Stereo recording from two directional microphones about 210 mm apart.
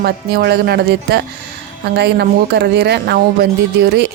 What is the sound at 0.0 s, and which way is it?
A woman's voice, 50° right (ahead or behind).